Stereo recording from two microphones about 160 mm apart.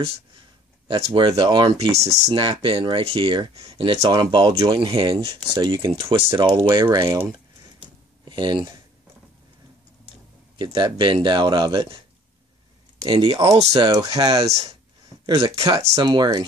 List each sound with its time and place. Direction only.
0.8 s speech: 30° right (ahead or behind)
1.9 s speech: 40° right (ahead or behind)
2.4 s speech: 30° right (ahead or behind)
8.3 s speech: 30° right (ahead or behind)
10.6 s speech: 30° right (ahead or behind)
13.0 s speech: 30° right (ahead or behind)
13.7 s speech: 25° right (ahead or behind)